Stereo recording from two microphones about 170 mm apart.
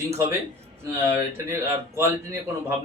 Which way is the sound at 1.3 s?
15° right (ahead or behind).